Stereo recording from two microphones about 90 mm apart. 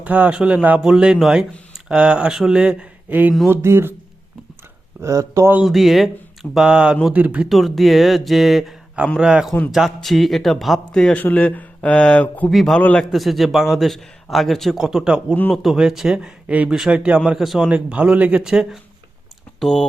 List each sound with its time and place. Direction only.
0.0 s a man's voice: 15° right (ahead or behind)
5.0 s speech: 35° right (ahead or behind)
5.6 s a man's voice: centre (ahead or behind)
7.4 s a man's voice: centre (ahead or behind)
11.2 s speech: 20° left (ahead or behind)
12.5 s a man's voice: centre (ahead or behind)
12.8 s speech: 15° left (ahead or behind)
13.1 s a man's voice: centre (ahead or behind)
19.5 s speech: 5° left (ahead or behind)